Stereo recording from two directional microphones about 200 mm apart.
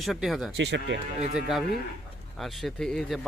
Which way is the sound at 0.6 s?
60° right (ahead or behind).